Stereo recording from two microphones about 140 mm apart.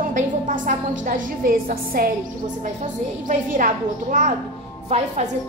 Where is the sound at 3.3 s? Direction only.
70° right (ahead or behind).